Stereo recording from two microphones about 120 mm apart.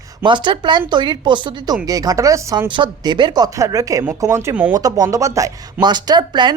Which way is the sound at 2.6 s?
40° right (ahead or behind).